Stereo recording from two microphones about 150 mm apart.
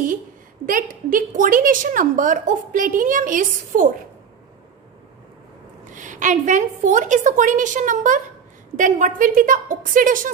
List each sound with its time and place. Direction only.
0.7 s a woman's voice: 65° right (ahead or behind)
5.9 s a woman's voice: 60° right (ahead or behind)